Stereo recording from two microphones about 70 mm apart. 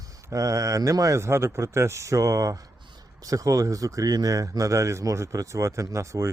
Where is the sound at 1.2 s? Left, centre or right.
Right.